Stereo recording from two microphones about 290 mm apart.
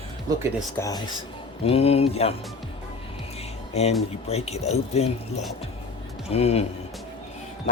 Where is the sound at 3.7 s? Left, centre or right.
Left.